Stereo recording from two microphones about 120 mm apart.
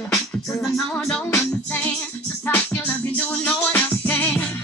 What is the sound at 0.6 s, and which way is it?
Music, centre (ahead or behind).